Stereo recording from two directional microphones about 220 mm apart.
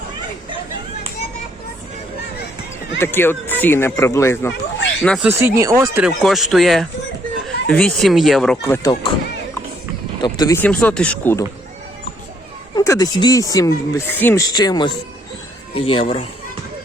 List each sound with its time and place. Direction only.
3.0 s speech: 10° left (ahead or behind)
5.0 s speech: centre (ahead or behind)
5.3 s speech: 10° right (ahead or behind)
8.6 s speech: 15° left (ahead or behind)
10.2 s speech: 20° left (ahead or behind)
12.7 s speech: 15° left (ahead or behind)